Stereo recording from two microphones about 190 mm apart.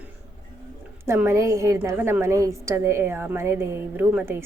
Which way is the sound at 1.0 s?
15° right (ahead or behind).